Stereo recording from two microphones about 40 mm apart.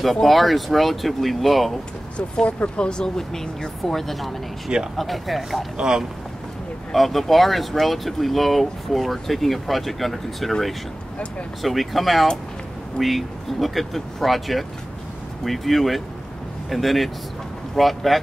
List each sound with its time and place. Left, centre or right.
0.0 s speech: centre
2.1 s speech: left; by 5.7 s centre
5.8 s speech: centre
6.9 s speech: centre
11.6 s speech: centre